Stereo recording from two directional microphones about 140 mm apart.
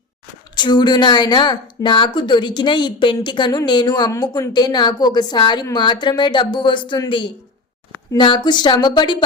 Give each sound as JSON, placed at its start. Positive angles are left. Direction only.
{"t": 0.5, "sound": "a woman's voice", "side_deg": 30}